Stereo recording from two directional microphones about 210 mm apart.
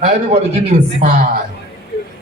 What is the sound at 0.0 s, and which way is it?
Speech, 30° right (ahead or behind).